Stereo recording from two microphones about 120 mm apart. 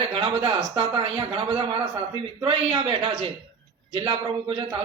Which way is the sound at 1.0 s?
50° right (ahead or behind).